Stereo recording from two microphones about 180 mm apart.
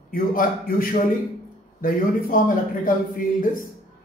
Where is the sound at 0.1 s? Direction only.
50° left (ahead or behind).